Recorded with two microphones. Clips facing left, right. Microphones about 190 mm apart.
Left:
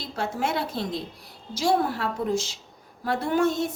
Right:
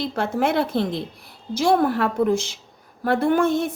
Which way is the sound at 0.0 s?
55° right (ahead or behind).